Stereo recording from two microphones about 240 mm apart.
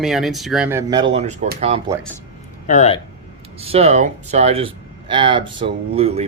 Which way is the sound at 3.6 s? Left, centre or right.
Right.